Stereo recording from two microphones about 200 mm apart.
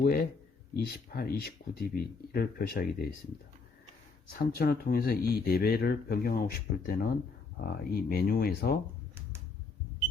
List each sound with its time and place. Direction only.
0.0 s speech: 45° left (ahead or behind)
4.3 s speech: 45° left (ahead or behind)